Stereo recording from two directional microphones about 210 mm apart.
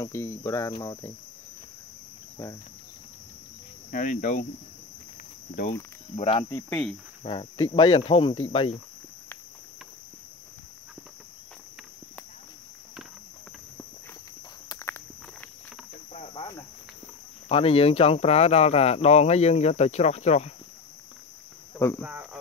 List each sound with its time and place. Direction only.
0.0 s cricket: 10° left (ahead or behind)
3.9 s speech: 40° left (ahead or behind)
6.1 s speech: 25° left (ahead or behind)
6.5 s cricket: 10° left (ahead or behind)
7.2 s speech: 25° left (ahead or behind)
14.7 s walk: 10° left (ahead or behind)
16.1 s cricket: 30° left (ahead or behind)
17.5 s speech: 25° left (ahead or behind)
21.7 s speech: 15° left (ahead or behind)
22.0 s speech: 10° right (ahead or behind)